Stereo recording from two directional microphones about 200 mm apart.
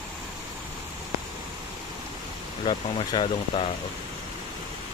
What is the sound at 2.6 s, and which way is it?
Speech, 25° left (ahead or behind).